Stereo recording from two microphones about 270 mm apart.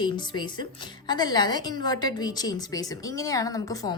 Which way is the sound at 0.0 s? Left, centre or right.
Centre.